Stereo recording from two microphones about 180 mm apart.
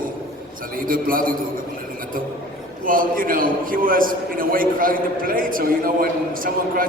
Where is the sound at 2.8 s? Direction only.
50° right (ahead or behind).